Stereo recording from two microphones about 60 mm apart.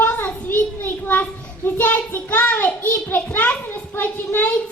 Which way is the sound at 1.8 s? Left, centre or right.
Left.